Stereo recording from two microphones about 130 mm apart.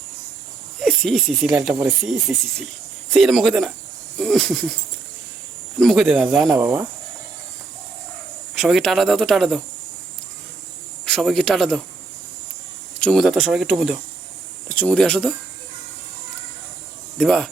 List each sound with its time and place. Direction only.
0.8 s speech: centre (ahead or behind)
5.8 s speech: centre (ahead or behind)
6.6 s speech: 15° right (ahead or behind)
8.5 s speech: centre (ahead or behind)
11.0 s speech: 5° left (ahead or behind)
13.0 s speech: 5° left (ahead or behind)
17.2 s speech: centre (ahead or behind)